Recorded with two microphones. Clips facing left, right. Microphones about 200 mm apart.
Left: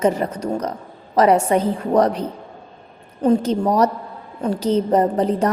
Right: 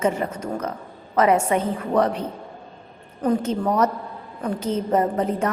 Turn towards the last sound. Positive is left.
turn(degrees=35)  # may be behind; listen again after turning